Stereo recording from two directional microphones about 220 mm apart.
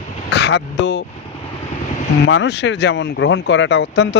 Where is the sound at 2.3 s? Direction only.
50° left (ahead or behind).